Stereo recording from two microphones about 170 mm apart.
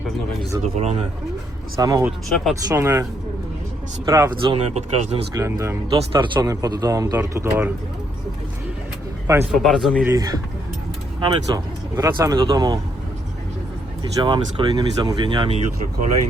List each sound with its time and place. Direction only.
0.6 s speech: 40° right (ahead or behind)
1.8 s speech: 20° right (ahead or behind)
2.3 s speech: centre (ahead or behind)
2.6 s speech: 15° right (ahead or behind)
4.5 s speech: 35° right (ahead or behind)
5.3 s speech: 20° right (ahead or behind)
6.0 s speech: 30° right (ahead or behind)
9.2 s speech: 15° right (ahead or behind)
9.6 s speech: centre (ahead or behind)
10.1 s speech: 20° right (ahead or behind)
14.0 s speech: 30° right (ahead or behind)